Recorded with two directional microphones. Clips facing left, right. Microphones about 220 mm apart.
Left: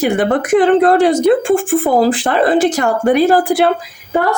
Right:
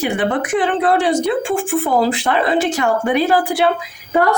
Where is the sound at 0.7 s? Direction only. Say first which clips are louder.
Left 5 dB; 45° left (ahead or behind).